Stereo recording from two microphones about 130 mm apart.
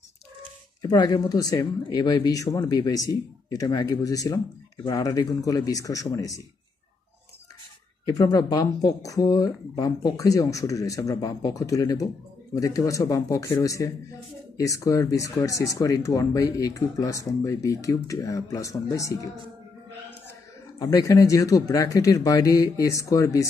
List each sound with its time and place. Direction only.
0.8 s speech: 35° left (ahead or behind)
8.0 s speech: 30° left (ahead or behind)
20.8 s speech: 30° left (ahead or behind)